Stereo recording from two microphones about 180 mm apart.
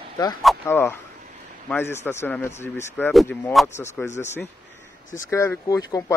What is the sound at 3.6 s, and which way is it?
Speech, 15° left (ahead or behind).